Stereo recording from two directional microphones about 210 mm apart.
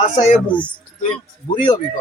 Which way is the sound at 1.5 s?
20° left (ahead or behind).